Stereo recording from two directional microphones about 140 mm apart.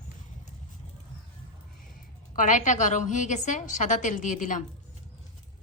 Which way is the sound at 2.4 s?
65° left (ahead or behind).